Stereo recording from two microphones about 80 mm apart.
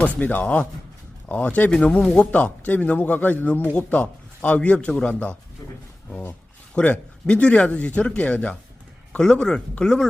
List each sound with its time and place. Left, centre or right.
0.2 s a man's voice: centre
6.7 s speech: centre